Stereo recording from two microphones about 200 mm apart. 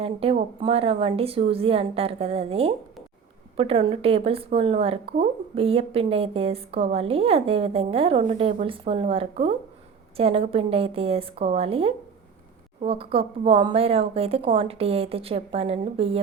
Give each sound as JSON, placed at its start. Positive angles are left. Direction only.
{"t": 0.0, "sound": "a woman's voice", "side_deg": -30}